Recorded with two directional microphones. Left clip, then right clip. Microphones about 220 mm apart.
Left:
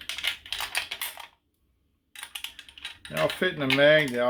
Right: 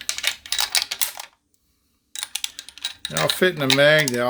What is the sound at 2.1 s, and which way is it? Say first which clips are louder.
Typing: right 8 dB; 40° right (ahead or behind).